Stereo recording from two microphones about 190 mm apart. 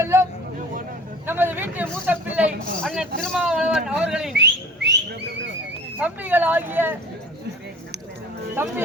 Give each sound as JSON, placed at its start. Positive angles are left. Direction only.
{"t": 0.0, "sound": "speech", "side_deg": -15}
{"t": 1.3, "sound": "a man's voice", "side_deg": -10}
{"t": 4.4, "sound": "a sound", "side_deg": -65}
{"t": 6.0, "sound": "speech", "side_deg": -10}
{"t": 8.6, "sound": "speech", "side_deg": -10}